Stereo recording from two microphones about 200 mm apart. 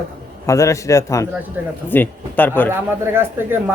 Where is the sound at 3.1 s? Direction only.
10° right (ahead or behind).